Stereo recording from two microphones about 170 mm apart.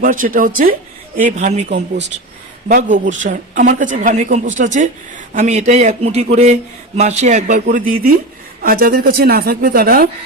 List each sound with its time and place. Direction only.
0.0 s a man's voice: 50° right (ahead or behind)
1.5 s a man's voice: 40° right (ahead or behind); by 10.1 s 60° right (ahead or behind)